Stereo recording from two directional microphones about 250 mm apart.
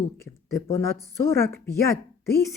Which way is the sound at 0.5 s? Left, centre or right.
Centre.